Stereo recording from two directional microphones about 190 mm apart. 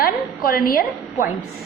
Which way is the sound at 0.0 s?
50° left (ahead or behind).